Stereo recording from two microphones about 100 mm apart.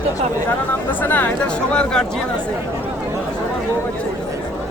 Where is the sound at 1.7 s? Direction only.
10° left (ahead or behind).